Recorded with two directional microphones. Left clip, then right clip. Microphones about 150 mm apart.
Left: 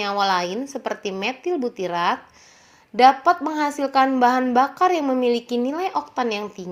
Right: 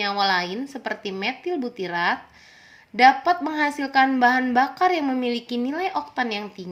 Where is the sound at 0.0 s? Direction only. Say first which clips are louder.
Left 1 dB; 15° left (ahead or behind).